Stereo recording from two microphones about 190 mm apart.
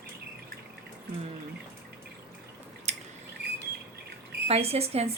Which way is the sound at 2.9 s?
35° right (ahead or behind).